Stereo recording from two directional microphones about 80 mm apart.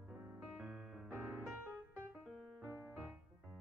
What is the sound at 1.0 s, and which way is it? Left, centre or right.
Music, right.